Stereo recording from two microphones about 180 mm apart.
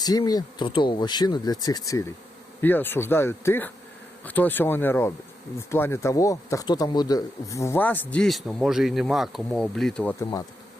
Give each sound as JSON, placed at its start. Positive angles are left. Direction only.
{"t": 0.0, "sound": "speech", "side_deg": 20}